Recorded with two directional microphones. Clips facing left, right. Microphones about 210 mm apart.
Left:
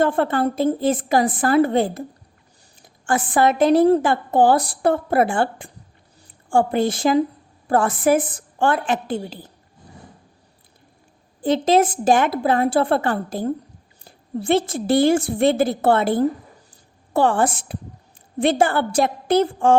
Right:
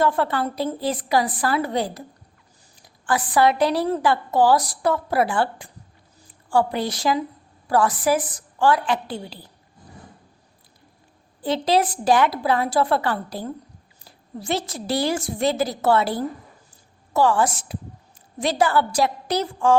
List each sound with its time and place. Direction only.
0.0 s a woman's voice: 50° left (ahead or behind)
11.3 s a woman's voice: 45° left (ahead or behind)
14.0 s a sound: 55° left (ahead or behind)
14.8 s a woman's voice: 50° left (ahead or behind)